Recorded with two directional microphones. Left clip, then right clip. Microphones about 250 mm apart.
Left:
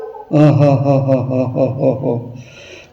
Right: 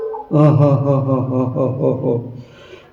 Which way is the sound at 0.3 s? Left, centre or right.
Centre.